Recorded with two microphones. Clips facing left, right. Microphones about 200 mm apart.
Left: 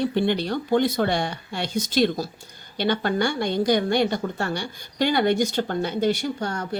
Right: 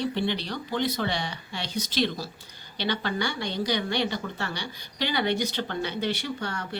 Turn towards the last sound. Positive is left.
turn(degrees=45)  # may be behind; listen again after turning